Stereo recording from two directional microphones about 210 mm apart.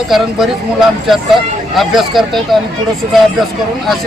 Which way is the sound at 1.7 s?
Centre (ahead or behind).